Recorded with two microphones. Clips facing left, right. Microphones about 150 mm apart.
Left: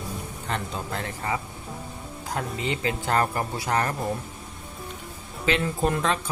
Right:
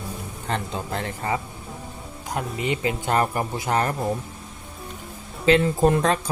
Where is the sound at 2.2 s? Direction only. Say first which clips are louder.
Right 2 dB; 20° right (ahead or behind).